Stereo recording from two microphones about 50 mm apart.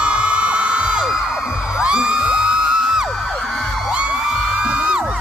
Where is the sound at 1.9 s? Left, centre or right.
Centre.